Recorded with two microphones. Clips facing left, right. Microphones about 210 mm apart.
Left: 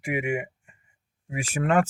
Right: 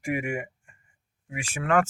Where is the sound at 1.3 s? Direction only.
40° left (ahead or behind).